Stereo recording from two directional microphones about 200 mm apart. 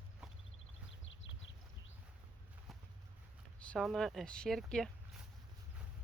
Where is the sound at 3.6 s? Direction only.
5° left (ahead or behind).